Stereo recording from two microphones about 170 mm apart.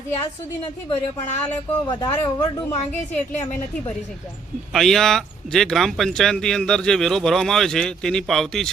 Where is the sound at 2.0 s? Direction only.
25° left (ahead or behind).